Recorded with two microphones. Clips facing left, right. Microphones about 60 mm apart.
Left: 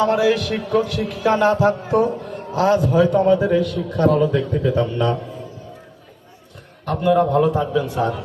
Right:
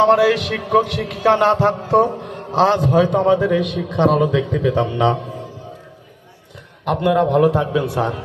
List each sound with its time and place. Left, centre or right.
0.0 s a man's voice: right
6.8 s a man's voice: right